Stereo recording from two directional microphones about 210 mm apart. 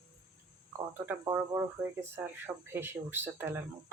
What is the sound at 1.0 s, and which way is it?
Speech, 10° right (ahead or behind).